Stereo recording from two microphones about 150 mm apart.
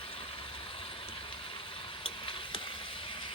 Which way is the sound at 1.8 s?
35° left (ahead or behind).